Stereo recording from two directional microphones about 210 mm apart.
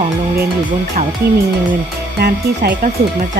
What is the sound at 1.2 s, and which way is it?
Speech, 50° right (ahead or behind).